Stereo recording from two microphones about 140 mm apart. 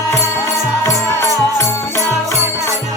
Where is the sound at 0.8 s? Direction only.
15° left (ahead or behind).